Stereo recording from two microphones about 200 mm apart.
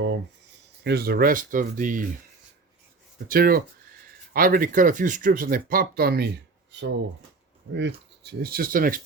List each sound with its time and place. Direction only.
0.9 s speech: 50° right (ahead or behind)
3.2 s speech: 45° right (ahead or behind)